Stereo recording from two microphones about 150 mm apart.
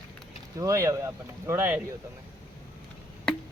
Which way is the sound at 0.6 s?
20° right (ahead or behind).